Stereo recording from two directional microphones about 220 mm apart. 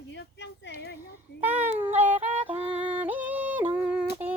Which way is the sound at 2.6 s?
5° right (ahead or behind).